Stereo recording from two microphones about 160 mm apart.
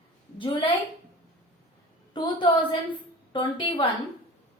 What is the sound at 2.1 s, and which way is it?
A woman's voice, 30° left (ahead or behind).